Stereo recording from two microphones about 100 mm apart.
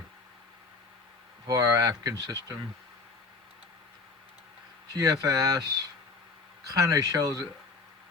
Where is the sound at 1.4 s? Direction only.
35° right (ahead or behind).